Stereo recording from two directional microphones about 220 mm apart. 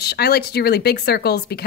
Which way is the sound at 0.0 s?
45° left (ahead or behind).